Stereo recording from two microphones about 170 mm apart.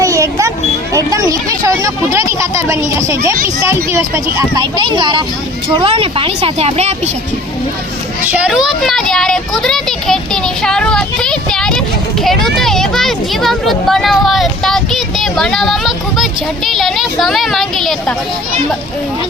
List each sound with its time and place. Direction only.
0.0 s a sound: 20° right (ahead or behind)
3.7 s speech: 15° right (ahead or behind); by 7.1 s 40° right (ahead or behind)
8.3 s speech: 5° right (ahead or behind)